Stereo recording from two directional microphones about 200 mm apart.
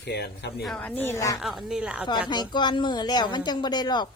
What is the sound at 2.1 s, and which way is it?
Speech, 20° left (ahead or behind).